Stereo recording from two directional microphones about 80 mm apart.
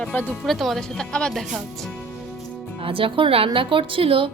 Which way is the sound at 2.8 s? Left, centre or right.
Right.